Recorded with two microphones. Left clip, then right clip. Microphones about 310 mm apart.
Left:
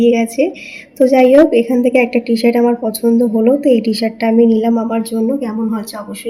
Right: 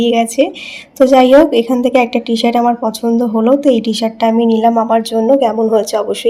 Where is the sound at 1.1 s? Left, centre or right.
Right.